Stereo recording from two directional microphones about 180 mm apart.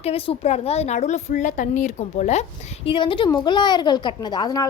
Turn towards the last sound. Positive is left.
turn(degrees=20)  # may be behind; listen again after turning